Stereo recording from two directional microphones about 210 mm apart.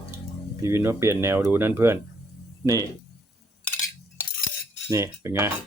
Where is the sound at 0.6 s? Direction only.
15° right (ahead or behind).